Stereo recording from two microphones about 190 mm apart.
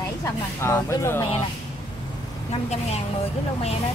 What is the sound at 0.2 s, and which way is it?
Speech, 15° left (ahead or behind).